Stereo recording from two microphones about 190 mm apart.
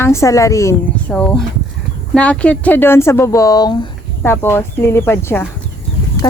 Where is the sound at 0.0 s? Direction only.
15° left (ahead or behind).